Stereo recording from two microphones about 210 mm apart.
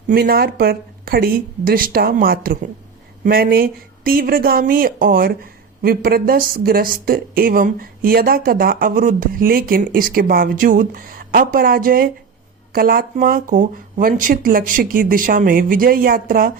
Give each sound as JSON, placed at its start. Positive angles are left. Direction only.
{"t": 0.1, "sound": "speech", "side_deg": -45}